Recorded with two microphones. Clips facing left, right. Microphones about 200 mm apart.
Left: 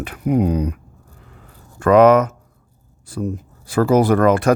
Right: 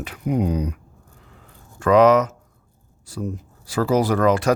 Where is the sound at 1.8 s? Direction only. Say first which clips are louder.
Left 3 dB; 55° left (ahead or behind).